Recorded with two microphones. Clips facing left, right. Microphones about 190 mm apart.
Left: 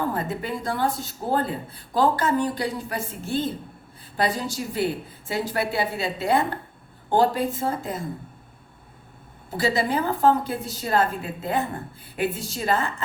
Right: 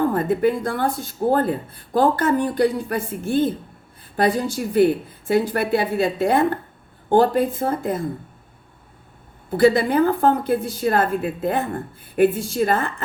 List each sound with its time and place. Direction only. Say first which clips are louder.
0.0 s speech: right 9 dB; 50° right (ahead or behind)
9.6 s speech: right 8 dB; 55° right (ahead or behind)